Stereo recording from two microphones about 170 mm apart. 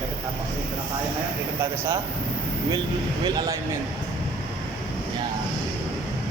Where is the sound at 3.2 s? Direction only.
25° right (ahead or behind).